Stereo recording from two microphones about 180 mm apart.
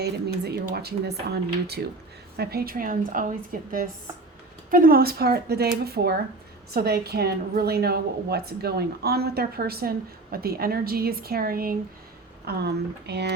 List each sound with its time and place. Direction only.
0.0 s a woman's voice: 65° right (ahead or behind)